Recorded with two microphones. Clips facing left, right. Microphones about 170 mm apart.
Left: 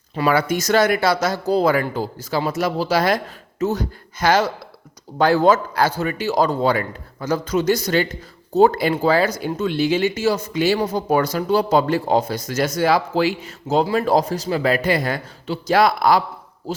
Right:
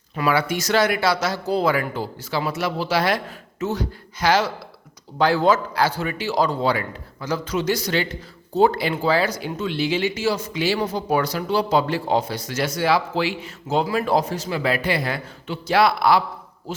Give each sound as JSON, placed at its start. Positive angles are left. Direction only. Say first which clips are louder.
{"t": 0.2, "sound": "speech", "louder": "left 3 dB", "side_deg": 40}